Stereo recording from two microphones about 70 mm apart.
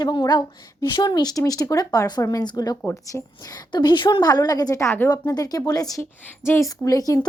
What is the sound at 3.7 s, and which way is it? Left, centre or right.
A woman's voice, left.